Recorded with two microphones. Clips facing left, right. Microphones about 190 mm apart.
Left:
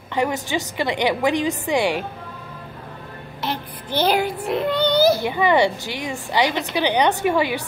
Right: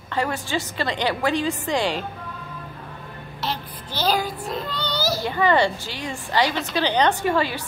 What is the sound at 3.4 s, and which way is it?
Child singing, 55° left (ahead or behind).